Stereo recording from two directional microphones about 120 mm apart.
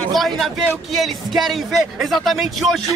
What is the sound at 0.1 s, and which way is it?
A man's voice, centre (ahead or behind).